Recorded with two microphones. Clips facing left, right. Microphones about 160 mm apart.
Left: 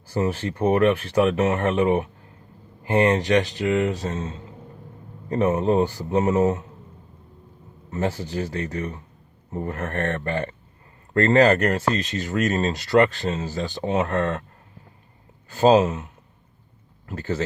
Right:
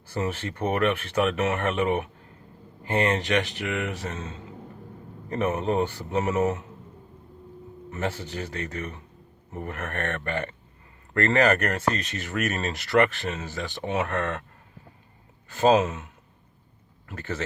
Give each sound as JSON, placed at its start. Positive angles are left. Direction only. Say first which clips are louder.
{"t": 0.2, "sound": "speech", "louder": "left 5 dB", "side_deg": 35}
{"t": 7.9, "sound": "speech", "louder": "left 5 dB", "side_deg": 30}
{"t": 15.4, "sound": "speech", "louder": "left 4 dB", "side_deg": 30}
{"t": 17.1, "sound": "speech", "louder": "left 6 dB", "side_deg": 35}